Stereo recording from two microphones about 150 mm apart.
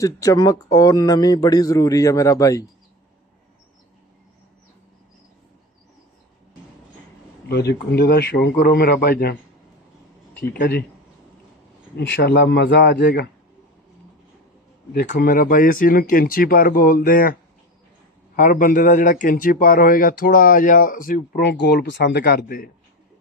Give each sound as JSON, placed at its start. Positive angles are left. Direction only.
{"t": 0.0, "sound": "speech", "side_deg": 20}
{"t": 7.4, "sound": "a man's voice", "side_deg": 90}
{"t": 10.6, "sound": "a man's voice", "side_deg": 90}
{"t": 12.2, "sound": "a man's voice", "side_deg": 90}
{"t": 14.9, "sound": "a man's voice", "side_deg": 90}